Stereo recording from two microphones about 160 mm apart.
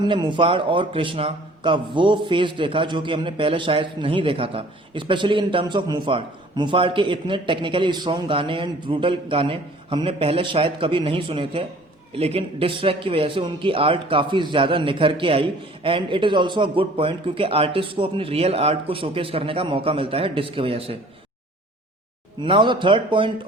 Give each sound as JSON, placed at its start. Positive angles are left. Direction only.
{"t": 0.0, "sound": "a man's voice", "side_deg": -30}
{"t": 22.4, "sound": "a man's voice", "side_deg": -30}